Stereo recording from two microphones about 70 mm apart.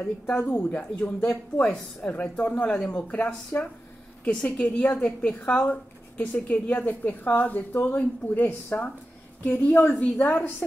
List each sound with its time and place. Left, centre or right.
0.5 s a woman's voice: left
1.3 s a woman's voice: centre